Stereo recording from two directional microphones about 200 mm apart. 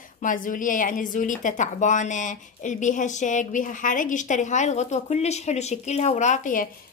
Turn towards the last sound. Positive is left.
turn(degrees=40)  # may be behind; listen again after turning